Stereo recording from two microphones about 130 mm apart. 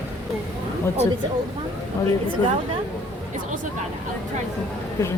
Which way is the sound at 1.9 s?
25° left (ahead or behind).